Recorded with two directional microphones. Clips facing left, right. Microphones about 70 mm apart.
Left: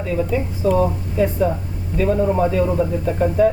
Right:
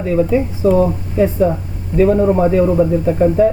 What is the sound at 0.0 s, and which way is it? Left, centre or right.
Speech, right.